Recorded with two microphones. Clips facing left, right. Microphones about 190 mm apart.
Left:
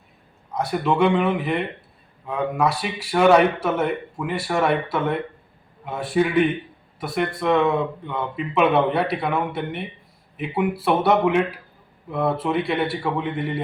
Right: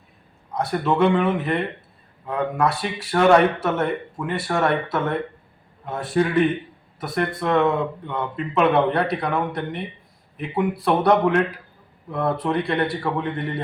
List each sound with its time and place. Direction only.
0.5 s speech: 5° left (ahead or behind)